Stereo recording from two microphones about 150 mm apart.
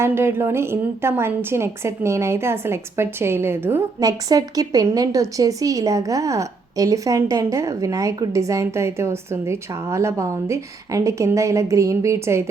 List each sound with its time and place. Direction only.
0.0 s a woman's voice: 15° right (ahead or behind)